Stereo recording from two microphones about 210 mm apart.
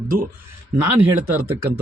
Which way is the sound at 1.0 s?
10° right (ahead or behind).